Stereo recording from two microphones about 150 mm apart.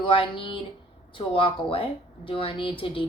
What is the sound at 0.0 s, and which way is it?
A woman's voice, 35° left (ahead or behind).